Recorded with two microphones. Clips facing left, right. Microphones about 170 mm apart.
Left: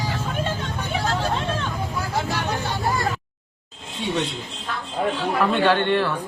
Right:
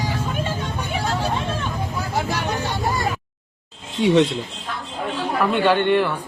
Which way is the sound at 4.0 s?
90° right.